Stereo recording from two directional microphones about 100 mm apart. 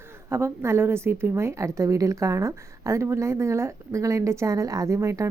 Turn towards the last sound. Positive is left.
turn(degrees=-30)  # may be behind; listen again after turning